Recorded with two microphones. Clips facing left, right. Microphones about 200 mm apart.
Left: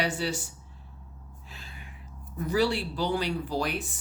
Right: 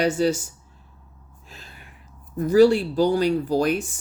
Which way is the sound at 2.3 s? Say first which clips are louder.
Right 11 dB; 40° right (ahead or behind).